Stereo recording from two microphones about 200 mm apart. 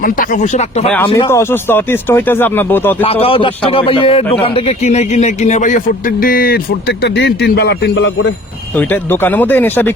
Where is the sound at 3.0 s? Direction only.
30° left (ahead or behind); by 8.3 s 65° left (ahead or behind).